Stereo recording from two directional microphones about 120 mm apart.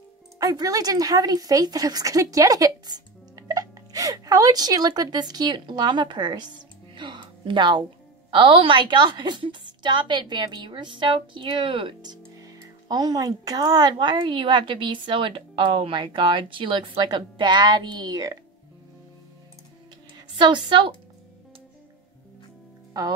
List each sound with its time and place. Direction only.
0.4 s speech: 30° right (ahead or behind)
7.0 s a sound: 40° right (ahead or behind)
8.3 s a woman's voice: 45° right (ahead or behind)
20.3 s a woman's voice: 40° right (ahead or behind)
23.0 s speech: 35° right (ahead or behind)